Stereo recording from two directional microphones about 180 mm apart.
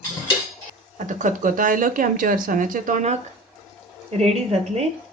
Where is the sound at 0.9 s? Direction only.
45° right (ahead or behind).